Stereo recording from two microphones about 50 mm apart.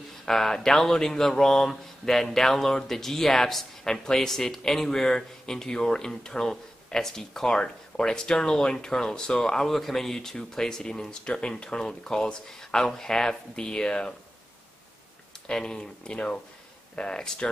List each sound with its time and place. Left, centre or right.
0.2 s speech: centre
15.4 s speech: centre